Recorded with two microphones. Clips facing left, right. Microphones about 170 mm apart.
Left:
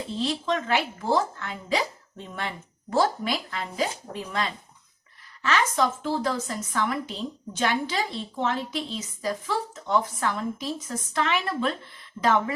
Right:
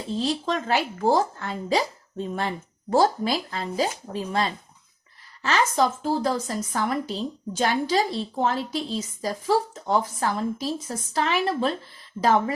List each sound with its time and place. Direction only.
0.2 s a woman's voice: 35° right (ahead or behind)